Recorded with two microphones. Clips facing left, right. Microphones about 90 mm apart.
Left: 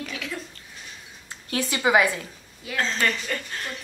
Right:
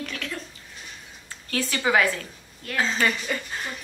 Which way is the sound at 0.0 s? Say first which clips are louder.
Even; 5° left (ahead or behind).